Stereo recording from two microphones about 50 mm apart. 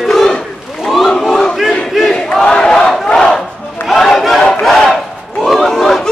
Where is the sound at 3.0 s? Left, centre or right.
Centre.